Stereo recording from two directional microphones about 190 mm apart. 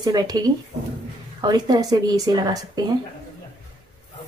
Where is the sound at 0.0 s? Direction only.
20° right (ahead or behind).